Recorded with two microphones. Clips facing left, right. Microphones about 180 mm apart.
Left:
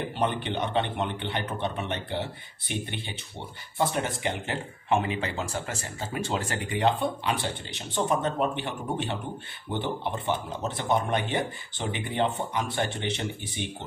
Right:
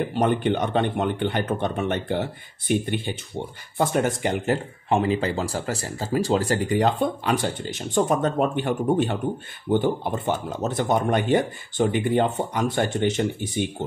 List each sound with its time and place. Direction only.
0.1 s speech: 45° right (ahead or behind)